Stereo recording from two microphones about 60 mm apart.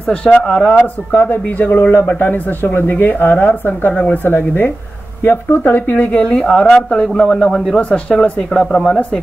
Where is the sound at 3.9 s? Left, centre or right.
Centre.